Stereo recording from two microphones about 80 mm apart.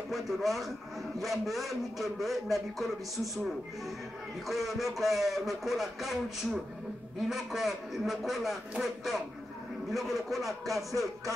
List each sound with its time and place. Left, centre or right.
0.1 s a man's voice: centre
4.5 s a man's voice: centre